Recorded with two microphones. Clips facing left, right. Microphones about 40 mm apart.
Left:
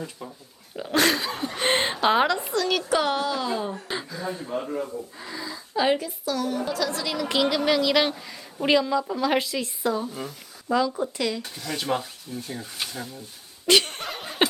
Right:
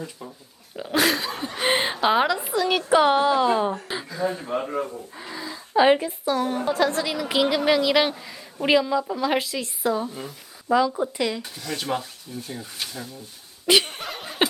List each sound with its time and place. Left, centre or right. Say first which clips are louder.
0.0 s speech: even; centre
0.8 s a sound: even; centre
2.6 s a child's voice: right 6 dB; centre
3.8 s a sound: right 5 dB; centre
4.4 s speech: right 3 dB; right
5.1 s a woman's voice: right 1 dB; centre
7.0 s a woman's voice: right 1 dB; centre
11.4 s speech: left 1 dB; centre
13.7 s laughter: right 1 dB; centre